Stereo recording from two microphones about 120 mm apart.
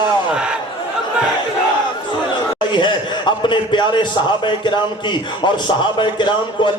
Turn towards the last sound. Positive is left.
turn(degrees=40)  # may be behind; listen again after turning